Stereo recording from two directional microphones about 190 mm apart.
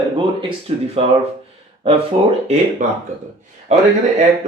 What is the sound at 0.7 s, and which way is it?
Speech, 35° right (ahead or behind).